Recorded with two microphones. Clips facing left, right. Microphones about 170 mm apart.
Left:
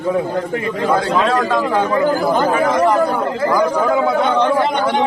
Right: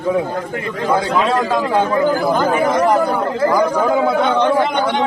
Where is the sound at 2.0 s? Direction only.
5° left (ahead or behind).